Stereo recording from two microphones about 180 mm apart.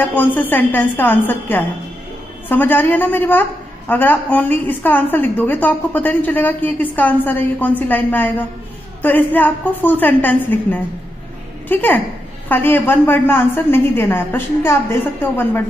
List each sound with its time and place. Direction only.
0.0 s a woman's voice: 10° left (ahead or behind)